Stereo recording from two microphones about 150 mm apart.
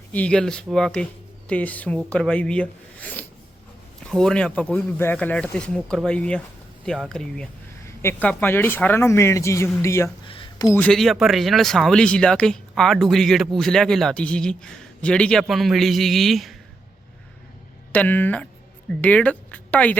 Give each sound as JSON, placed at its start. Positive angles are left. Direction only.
{"t": 0.1, "sound": "a man's voice", "side_deg": 10}
{"t": 10.2, "sound": "a sound", "side_deg": 35}
{"t": 10.7, "sound": "a man's voice", "side_deg": 10}
{"t": 17.9, "sound": "speech", "side_deg": 10}